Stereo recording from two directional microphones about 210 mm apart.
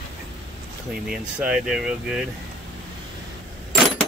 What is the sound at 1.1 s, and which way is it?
Speech, 5° right (ahead or behind).